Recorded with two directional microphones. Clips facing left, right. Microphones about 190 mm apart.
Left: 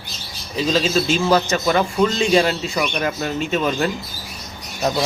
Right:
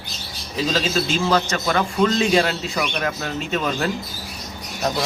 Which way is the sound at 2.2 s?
Centre (ahead or behind).